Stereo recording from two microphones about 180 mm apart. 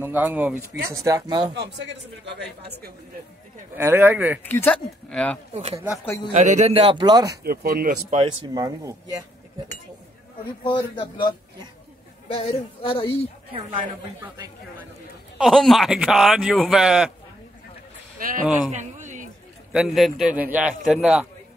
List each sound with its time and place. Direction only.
0.0 s speech: 10° right (ahead or behind)
1.5 s speech: 70° right (ahead or behind)
3.7 s speech: 10° right (ahead or behind)
4.4 s speech: 10° left (ahead or behind)
5.5 s a man's voice: 35° right (ahead or behind)
6.0 s a woman's voice: 20° left (ahead or behind)
6.3 s a man's voice: 40° right (ahead or behind); by 7.3 s 20° right (ahead or behind)
7.4 s speech: 55° right (ahead or behind)
8.1 s speech: 30° right (ahead or behind)
10.6 s a woman's voice: 30° left (ahead or behind)
15.3 s a man's voice: centre (ahead or behind)
18.7 s a sound: 40° right (ahead or behind)
19.7 s a man's voice: 5° right (ahead or behind)